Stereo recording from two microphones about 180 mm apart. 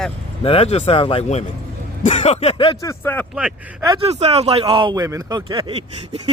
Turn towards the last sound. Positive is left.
turn(degrees=-25)  # may be behind; listen again after turning